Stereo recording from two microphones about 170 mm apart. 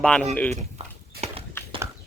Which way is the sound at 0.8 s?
40° right (ahead or behind).